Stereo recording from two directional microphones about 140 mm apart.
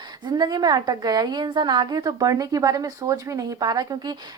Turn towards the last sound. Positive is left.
turn(degrees=-30)  # may be behind; listen again after turning